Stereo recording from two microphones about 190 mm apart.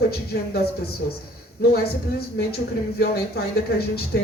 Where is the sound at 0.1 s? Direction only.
55° left (ahead or behind).